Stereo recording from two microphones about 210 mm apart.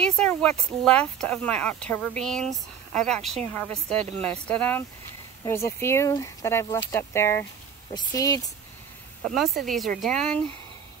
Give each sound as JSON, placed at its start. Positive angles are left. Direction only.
{"t": 0.0, "sound": "speech", "side_deg": 5}
{"t": 9.2, "sound": "speech", "side_deg": 0}